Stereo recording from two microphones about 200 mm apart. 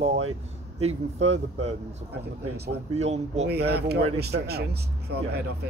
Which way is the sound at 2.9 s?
35° right (ahead or behind).